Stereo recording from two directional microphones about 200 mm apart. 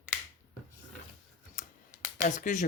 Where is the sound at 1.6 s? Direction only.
40° left (ahead or behind).